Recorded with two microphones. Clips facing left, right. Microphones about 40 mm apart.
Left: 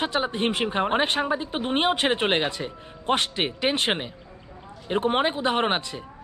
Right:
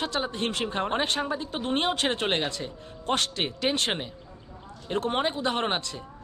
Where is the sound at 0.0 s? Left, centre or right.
Left.